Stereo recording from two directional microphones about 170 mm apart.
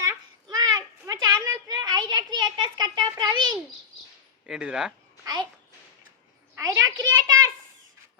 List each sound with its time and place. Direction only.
0.0 s children playing: 25° right (ahead or behind)
4.4 s speech: 5° right (ahead or behind)
6.6 s a sound: 20° right (ahead or behind)